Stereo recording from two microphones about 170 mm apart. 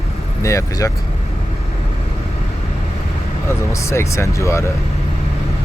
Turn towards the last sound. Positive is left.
turn(degrees=15)  # may be behind; listen again after turning